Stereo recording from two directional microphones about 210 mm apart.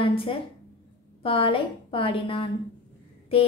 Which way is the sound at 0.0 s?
25° left (ahead or behind).